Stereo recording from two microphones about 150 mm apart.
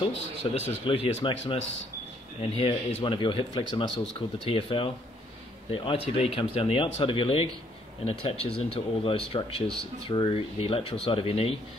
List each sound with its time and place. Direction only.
0.6 s speech: 40° left (ahead or behind)